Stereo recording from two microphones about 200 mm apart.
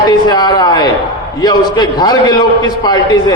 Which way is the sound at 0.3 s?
20° left (ahead or behind).